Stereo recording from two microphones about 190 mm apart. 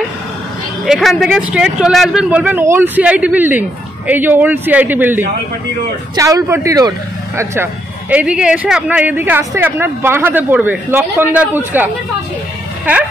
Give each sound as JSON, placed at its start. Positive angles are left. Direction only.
{"t": 0.8, "sound": "speech", "side_deg": 0}